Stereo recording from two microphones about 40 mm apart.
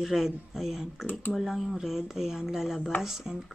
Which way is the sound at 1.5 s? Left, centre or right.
Centre.